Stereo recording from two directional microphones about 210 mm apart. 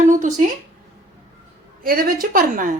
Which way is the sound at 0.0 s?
35° right (ahead or behind).